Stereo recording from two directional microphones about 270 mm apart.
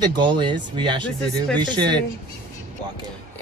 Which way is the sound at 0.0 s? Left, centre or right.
Centre.